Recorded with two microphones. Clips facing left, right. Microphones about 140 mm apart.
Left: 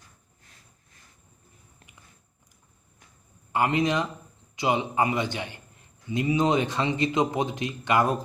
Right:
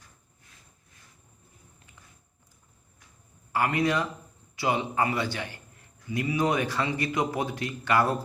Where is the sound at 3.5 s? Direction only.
20° left (ahead or behind).